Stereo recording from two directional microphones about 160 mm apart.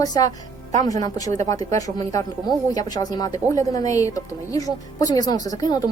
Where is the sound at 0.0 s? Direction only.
25° left (ahead or behind).